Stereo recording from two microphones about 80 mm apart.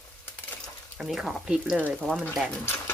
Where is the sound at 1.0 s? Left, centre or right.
Centre.